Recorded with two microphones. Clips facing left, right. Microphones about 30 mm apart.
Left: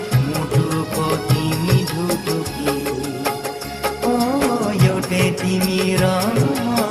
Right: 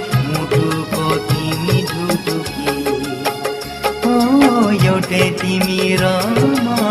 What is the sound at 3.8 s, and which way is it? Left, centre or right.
Music of bollywood, right.